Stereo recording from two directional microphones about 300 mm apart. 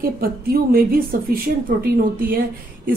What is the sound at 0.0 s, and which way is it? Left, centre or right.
A woman's voice, right.